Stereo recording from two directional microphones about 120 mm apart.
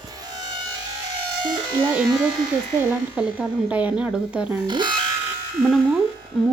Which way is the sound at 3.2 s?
10° right (ahead or behind).